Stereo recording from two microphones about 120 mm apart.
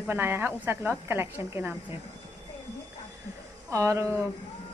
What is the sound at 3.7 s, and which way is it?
Speech, 25° right (ahead or behind).